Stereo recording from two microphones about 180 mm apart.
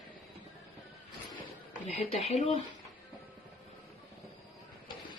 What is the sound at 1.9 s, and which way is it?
Speech, 35° left (ahead or behind).